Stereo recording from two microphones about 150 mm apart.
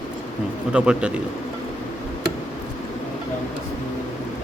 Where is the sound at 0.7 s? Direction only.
5° right (ahead or behind).